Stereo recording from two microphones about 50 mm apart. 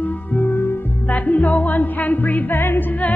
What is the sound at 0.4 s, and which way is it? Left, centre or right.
Music, left.